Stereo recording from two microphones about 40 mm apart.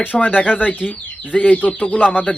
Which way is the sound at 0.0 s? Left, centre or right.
Left.